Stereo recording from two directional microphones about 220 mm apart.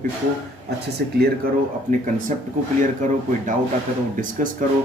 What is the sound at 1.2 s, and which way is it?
Speech, 40° right (ahead or behind).